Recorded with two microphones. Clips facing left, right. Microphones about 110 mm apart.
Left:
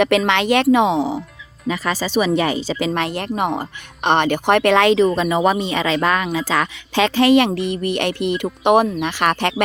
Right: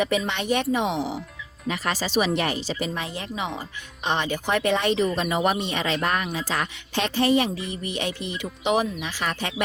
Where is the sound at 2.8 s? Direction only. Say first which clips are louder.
Left 9 dB; 85° left.